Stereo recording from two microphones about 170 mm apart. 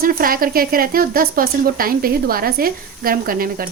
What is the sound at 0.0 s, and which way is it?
Speech, 55° right (ahead or behind).